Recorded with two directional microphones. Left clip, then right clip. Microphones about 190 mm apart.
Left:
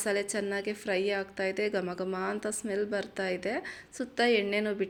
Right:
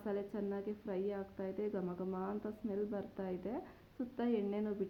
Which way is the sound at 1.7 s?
35° left (ahead or behind).